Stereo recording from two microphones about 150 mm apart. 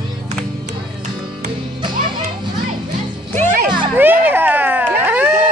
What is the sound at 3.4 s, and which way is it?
Music, 65° right (ahead or behind).